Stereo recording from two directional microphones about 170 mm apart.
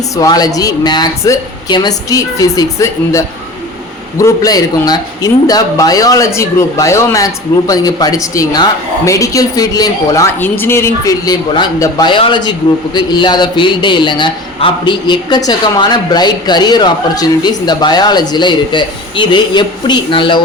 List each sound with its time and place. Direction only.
0.2 s a man's voice: 20° left (ahead or behind)